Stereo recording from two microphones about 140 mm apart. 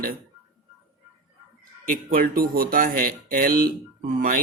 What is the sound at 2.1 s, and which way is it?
Speech, 85° right.